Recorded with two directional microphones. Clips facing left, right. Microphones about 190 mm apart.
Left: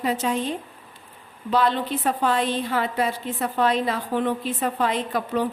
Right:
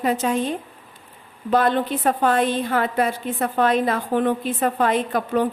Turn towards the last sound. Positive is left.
turn(degrees=-50)  # may be behind; listen again after turning